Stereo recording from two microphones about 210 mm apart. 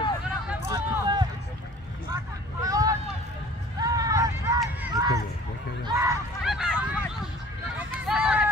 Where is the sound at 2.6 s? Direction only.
15° right (ahead or behind).